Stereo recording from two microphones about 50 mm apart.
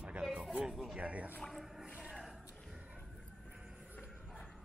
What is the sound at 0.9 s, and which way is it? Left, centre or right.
Speech, right.